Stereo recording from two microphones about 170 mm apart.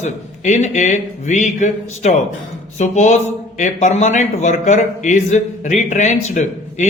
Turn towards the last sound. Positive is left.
turn(degrees=45)  # may be behind; listen again after turning